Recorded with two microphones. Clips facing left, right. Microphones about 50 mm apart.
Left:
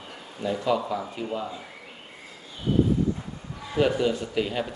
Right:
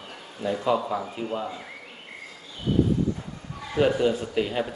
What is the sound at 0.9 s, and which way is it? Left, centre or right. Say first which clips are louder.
Speech: right 1 dB; right.